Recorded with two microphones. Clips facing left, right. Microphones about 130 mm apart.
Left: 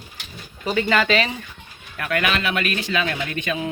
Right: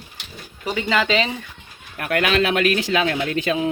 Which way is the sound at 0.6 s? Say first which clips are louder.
Left 1 dB; 15° right (ahead or behind).